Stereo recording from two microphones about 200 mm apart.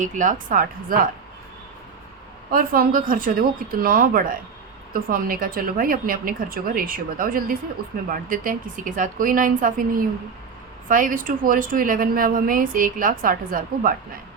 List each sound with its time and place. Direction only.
0.0 s speech: 40° right (ahead or behind)
2.5 s a woman's voice: 45° right (ahead or behind)